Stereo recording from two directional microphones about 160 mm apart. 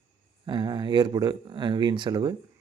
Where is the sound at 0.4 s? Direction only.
30° right (ahead or behind).